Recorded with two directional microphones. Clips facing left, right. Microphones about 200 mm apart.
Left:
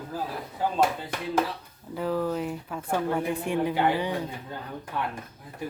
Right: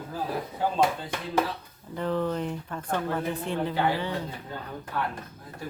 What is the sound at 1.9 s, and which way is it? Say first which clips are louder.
A woman's voice: even; 5° left (ahead or behind).